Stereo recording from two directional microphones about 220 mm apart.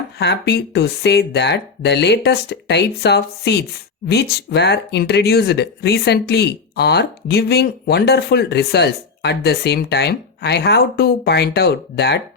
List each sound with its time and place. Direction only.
0.2 s speech: 50° left (ahead or behind)